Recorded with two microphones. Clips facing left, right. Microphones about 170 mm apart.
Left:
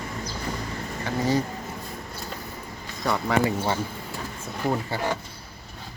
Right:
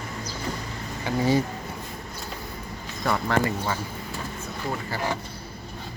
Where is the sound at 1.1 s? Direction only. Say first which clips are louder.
Right 2 dB; 10° right (ahead or behind).